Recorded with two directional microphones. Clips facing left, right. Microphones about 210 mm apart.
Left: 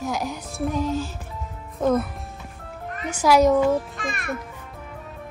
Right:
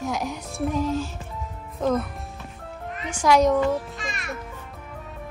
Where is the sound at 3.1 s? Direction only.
5° left (ahead or behind).